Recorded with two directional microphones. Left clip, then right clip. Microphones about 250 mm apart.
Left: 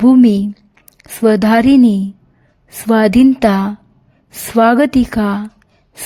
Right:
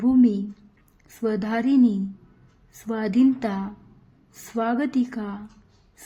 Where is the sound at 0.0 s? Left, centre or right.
Left.